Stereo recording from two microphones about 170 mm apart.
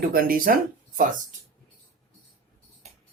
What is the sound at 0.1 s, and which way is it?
Speech, 60° right (ahead or behind).